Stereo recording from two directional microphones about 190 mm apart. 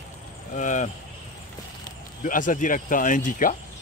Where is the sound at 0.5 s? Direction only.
40° left (ahead or behind).